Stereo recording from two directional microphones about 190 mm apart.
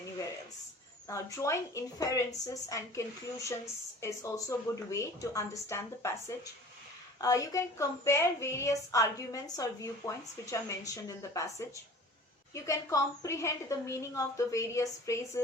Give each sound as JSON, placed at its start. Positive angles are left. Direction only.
{"t": 1.0, "sound": "a woman's voice", "side_deg": 15}
{"t": 12.5, "sound": "a woman's voice", "side_deg": 15}